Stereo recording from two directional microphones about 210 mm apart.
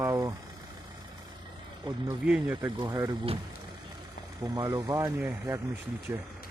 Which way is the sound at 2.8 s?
20° right (ahead or behind).